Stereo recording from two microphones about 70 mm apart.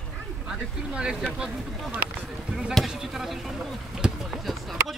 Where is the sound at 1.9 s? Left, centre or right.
Right.